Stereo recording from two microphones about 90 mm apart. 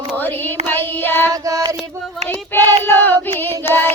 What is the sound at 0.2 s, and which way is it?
Child singing, 20° left (ahead or behind).